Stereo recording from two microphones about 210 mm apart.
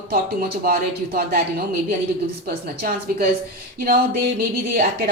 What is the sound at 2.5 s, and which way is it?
Speech, 45° right (ahead or behind).